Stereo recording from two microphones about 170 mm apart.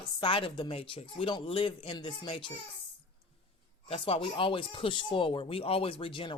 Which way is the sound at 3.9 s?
35° left (ahead or behind).